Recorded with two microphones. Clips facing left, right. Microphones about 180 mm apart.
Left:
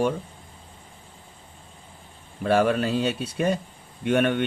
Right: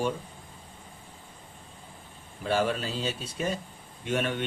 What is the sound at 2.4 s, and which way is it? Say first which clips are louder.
Speech: left 6 dB; 60° left (ahead or behind).